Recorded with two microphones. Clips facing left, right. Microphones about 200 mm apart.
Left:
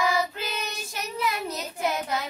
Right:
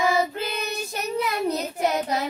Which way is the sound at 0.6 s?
35° right (ahead or behind).